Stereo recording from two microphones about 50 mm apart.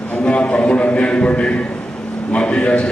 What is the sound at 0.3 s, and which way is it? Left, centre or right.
A man's voice, left.